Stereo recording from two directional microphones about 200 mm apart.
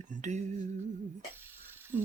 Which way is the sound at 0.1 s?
35° right (ahead or behind).